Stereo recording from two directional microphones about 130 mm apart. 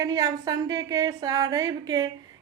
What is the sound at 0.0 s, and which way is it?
A woman's voice, 30° right (ahead or behind).